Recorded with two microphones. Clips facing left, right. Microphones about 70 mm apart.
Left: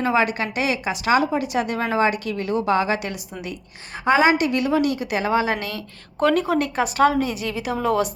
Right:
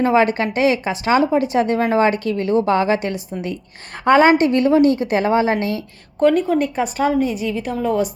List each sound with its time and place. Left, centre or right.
0.0 s a woman's voice: right
4.0 s a woman's voice: right
6.1 s a woman's voice: centre